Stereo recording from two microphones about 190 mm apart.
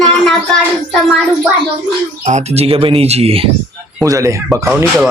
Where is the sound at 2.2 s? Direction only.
40° right (ahead or behind).